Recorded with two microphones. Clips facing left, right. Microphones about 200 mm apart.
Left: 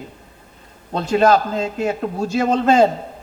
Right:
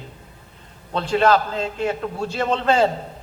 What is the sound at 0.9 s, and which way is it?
A man's voice, 45° left (ahead or behind).